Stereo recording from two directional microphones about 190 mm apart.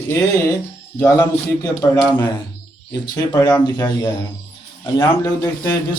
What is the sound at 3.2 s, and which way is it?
Speech, 15° left (ahead or behind).